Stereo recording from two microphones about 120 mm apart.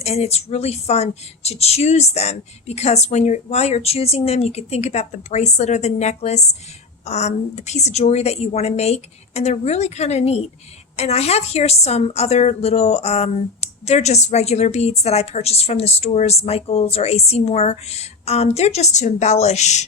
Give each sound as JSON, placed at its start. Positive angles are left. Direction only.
{"t": 0.0, "sound": "speech", "side_deg": 60}